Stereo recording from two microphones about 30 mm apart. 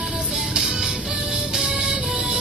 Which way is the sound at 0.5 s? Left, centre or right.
Centre.